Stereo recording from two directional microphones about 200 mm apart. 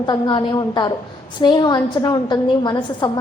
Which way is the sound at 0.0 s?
20° left (ahead or behind).